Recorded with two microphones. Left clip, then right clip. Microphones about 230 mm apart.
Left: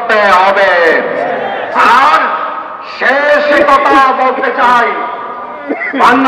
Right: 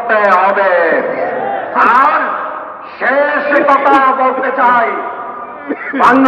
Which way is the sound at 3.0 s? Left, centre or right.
Left.